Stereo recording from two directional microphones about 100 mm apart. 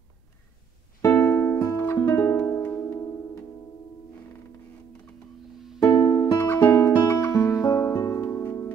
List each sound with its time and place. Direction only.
1.1 s music: 20° left (ahead or behind)
1.6 s music: 35° left (ahead or behind)
1.9 s music: 20° left (ahead or behind)
5.8 s music: 45° left (ahead or behind)
6.5 s music: 20° left (ahead or behind)